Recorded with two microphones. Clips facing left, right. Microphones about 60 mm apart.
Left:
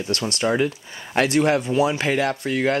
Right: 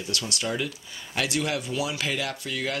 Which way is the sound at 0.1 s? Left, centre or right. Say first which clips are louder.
Left 8 dB; left.